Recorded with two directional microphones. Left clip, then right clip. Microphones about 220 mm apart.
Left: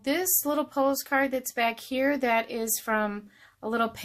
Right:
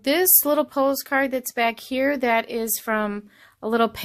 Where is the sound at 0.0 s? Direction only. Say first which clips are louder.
Right 7 dB; 35° right (ahead or behind).